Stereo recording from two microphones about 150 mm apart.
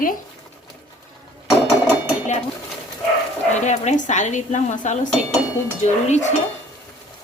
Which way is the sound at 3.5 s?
50° left (ahead or behind).